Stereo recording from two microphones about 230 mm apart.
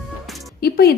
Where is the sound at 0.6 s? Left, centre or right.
Left.